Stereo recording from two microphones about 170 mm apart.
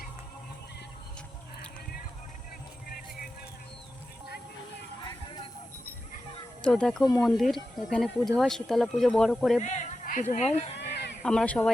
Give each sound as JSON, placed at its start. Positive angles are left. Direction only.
{"t": 6.6, "sound": "speech", "side_deg": 5}
{"t": 9.6, "sound": "speech", "side_deg": 45}
{"t": 10.8, "sound": "fowl", "side_deg": 80}
{"t": 11.2, "sound": "speech", "side_deg": 5}